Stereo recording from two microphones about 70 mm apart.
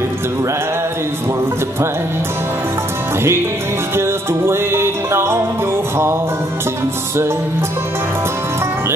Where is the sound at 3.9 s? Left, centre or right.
Right.